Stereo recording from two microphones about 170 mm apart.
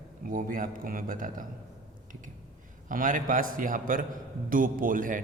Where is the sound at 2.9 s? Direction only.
50° right (ahead or behind).